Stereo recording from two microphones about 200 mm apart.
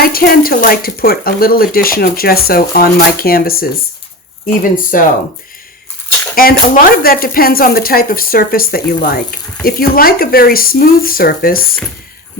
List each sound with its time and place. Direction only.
0.1 s speech: 45° left (ahead or behind)
6.3 s speech: 45° left (ahead or behind)